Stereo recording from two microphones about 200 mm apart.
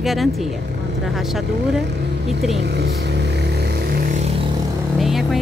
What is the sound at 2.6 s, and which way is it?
Vehicle, 55° right (ahead or behind).